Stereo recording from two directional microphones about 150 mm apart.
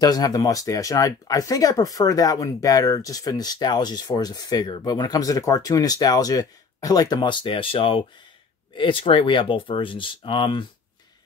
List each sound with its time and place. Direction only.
0.0 s speech: 25° left (ahead or behind)